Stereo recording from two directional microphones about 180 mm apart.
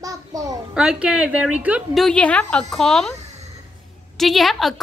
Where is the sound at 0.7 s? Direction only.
5° right (ahead or behind).